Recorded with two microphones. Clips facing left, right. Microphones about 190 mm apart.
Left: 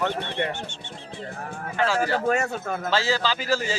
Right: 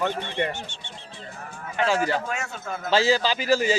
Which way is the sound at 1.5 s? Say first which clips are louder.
Left 4 dB; 55° left (ahead or behind).